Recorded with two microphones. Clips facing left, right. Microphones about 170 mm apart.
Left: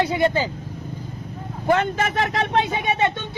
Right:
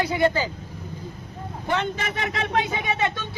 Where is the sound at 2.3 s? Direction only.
30° left (ahead or behind).